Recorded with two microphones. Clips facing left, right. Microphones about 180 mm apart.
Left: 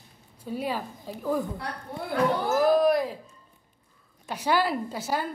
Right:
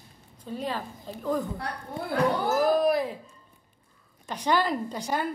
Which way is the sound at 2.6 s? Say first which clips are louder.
Left 3 dB; centre (ahead or behind).